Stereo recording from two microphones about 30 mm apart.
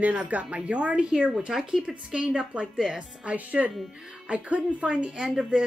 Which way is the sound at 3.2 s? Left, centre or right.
Right.